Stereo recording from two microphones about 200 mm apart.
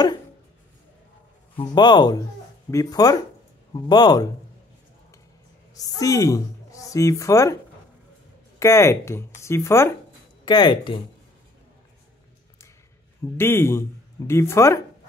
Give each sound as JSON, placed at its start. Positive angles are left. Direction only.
{"t": 1.6, "sound": "speech", "side_deg": 20}
{"t": 5.9, "sound": "speech", "side_deg": 15}
{"t": 8.5, "sound": "speech", "side_deg": 15}
{"t": 13.4, "sound": "speech", "side_deg": 10}